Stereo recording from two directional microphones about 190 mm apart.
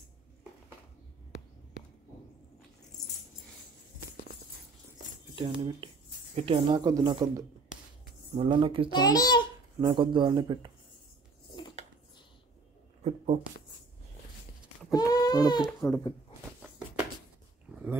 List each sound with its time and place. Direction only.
5.3 s a woman's voice: 25° right (ahead or behind)
8.9 s a child's voice: 20° left (ahead or behind)
9.8 s a woman's voice: 25° right (ahead or behind)
13.0 s a sound: 35° right (ahead or behind)
14.9 s a sound: 20° left (ahead or behind)
15.9 s a child's voice: 20° left (ahead or behind)